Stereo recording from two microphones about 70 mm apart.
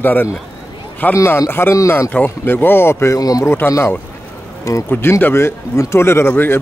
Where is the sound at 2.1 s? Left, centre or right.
Left.